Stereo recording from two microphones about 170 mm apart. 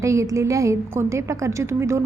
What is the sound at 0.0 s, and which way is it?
A woman's voice, 20° right (ahead or behind).